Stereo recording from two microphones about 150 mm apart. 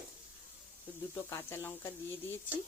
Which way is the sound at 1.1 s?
15° left (ahead or behind).